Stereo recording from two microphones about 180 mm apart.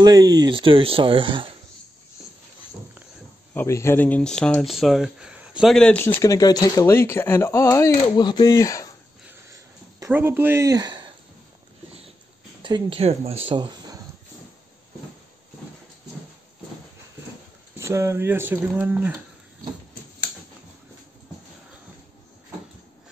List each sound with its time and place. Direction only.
0.0 s speech: 20° right (ahead or behind)
3.5 s speech: 15° left (ahead or behind)
9.5 s a sound: 15° right (ahead or behind)
12.6 s speech: 30° right (ahead or behind)
17.7 s speech: 15° right (ahead or behind)